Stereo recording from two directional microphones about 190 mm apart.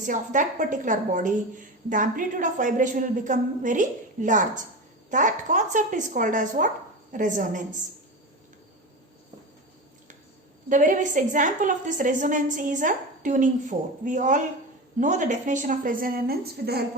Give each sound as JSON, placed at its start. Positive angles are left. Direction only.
{"t": 0.0, "sound": "a woman's voice", "side_deg": -40}
{"t": 10.7, "sound": "a woman's voice", "side_deg": -45}